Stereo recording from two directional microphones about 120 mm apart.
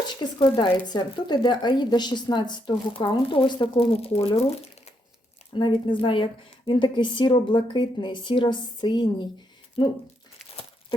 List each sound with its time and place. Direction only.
0.6 s a woman's voice: 40° left (ahead or behind); by 4.9 s 55° left (ahead or behind)
5.5 s a woman's voice: 40° left (ahead or behind)